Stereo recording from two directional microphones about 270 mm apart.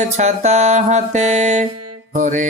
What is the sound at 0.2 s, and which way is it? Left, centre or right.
Music, right.